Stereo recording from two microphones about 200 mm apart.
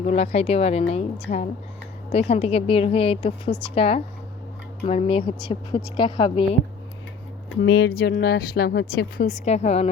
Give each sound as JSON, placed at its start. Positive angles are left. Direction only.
{"t": 0.0, "sound": "speech", "side_deg": 35}
{"t": 2.1, "sound": "speech", "side_deg": 30}
{"t": 7.5, "sound": "speech", "side_deg": 60}